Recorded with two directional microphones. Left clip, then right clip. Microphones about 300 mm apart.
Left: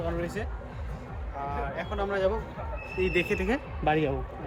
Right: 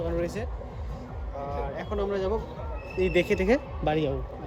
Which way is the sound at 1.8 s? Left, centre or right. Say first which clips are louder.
Left 2 dB; right.